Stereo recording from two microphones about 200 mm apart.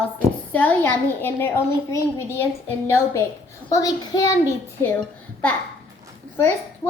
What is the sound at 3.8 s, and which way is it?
Speech, 15° left (ahead or behind).